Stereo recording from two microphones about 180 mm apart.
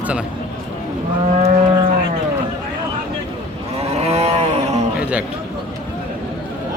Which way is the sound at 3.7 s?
35° right (ahead or behind).